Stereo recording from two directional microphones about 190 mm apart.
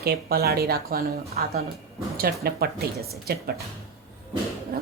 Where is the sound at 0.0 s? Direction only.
55° right (ahead or behind).